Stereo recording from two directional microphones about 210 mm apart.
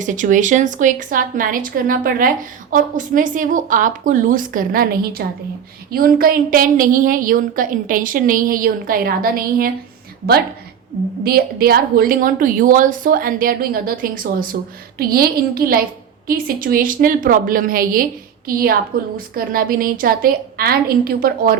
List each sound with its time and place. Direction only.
0.0 s a woman's voice: 35° right (ahead or behind)
11.2 s a woman's voice: 45° right (ahead or behind)